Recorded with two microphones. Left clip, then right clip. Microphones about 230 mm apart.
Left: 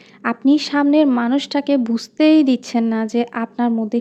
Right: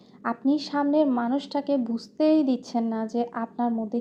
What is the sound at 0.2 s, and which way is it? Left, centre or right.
A woman's voice, left.